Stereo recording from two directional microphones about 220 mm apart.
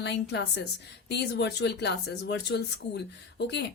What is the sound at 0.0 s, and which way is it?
A woman's voice, 50° left (ahead or behind).